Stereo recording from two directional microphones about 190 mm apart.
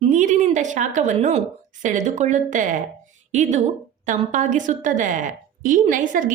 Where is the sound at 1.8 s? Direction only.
40° right (ahead or behind).